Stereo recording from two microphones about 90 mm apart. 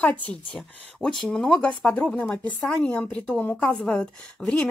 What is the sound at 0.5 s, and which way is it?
Speech, 5° left (ahead or behind).